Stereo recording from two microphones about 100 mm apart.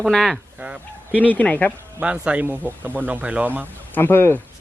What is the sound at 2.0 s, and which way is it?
Speech, 10° right (ahead or behind).